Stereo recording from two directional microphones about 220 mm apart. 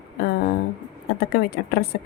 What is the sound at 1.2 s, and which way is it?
Speech, 45° left (ahead or behind).